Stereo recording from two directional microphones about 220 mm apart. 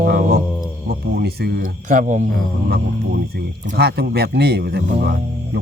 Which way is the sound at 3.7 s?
45° right (ahead or behind).